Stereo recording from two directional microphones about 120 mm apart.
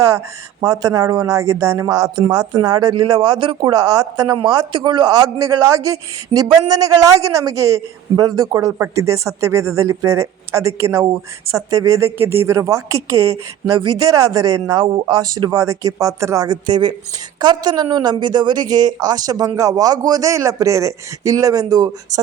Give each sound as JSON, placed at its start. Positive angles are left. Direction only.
{"t": 0.6, "sound": "a man's voice", "side_deg": -30}
{"t": 3.2, "sound": "speech", "side_deg": -45}
{"t": 3.7, "sound": "a man's voice", "side_deg": -30}
{"t": 4.4, "sound": "a man's voice", "side_deg": -45}
{"t": 14.8, "sound": "speech", "side_deg": -40}
{"t": 15.4, "sound": "a man's voice", "side_deg": -25}